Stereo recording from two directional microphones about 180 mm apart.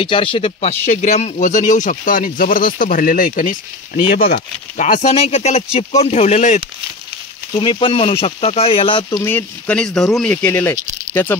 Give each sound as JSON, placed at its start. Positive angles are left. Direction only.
{"t": 0.0, "sound": "speech", "side_deg": 30}
{"t": 9.2, "sound": "speech", "side_deg": 10}